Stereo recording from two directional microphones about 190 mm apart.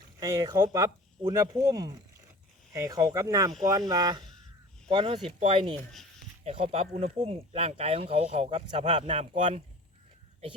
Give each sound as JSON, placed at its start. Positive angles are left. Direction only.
{"t": 0.2, "sound": "speech", "side_deg": -20}
{"t": 5.7, "sound": "speech", "side_deg": 0}
{"t": 6.4, "sound": "speech", "side_deg": -30}